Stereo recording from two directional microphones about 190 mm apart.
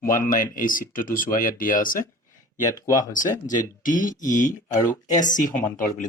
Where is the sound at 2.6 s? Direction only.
15° left (ahead or behind).